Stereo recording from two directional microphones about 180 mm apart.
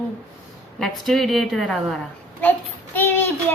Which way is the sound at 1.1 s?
Centre (ahead or behind).